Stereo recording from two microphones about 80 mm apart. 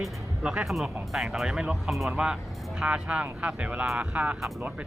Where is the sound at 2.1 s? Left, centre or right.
Centre.